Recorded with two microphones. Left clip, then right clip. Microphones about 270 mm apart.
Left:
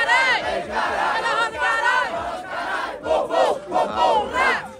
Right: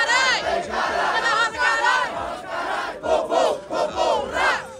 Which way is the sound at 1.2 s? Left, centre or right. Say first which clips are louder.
Right 1 dB; left.